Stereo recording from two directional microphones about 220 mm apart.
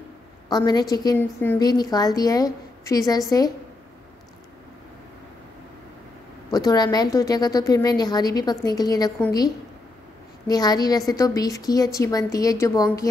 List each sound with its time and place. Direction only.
0.5 s a woman's voice: 20° left (ahead or behind)
6.5 s a woman's voice: 15° left (ahead or behind)